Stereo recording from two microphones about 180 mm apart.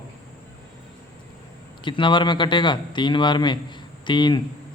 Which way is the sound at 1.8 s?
25° left (ahead or behind).